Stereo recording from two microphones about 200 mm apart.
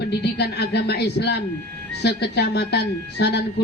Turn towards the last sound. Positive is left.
turn(degrees=55)  # may be behind; listen again after turning